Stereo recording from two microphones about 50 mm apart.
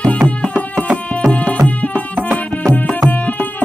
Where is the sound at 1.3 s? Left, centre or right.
Left.